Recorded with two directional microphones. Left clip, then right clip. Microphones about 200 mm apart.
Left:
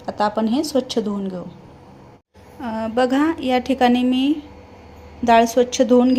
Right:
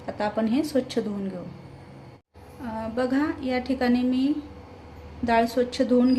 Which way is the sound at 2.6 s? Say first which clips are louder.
Left 8 dB; 35° left (ahead or behind).